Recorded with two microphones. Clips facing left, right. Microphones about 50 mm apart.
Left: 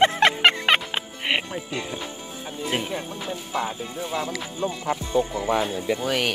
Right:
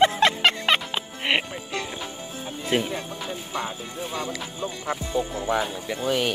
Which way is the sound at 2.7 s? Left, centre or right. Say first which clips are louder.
Right 4 dB; centre.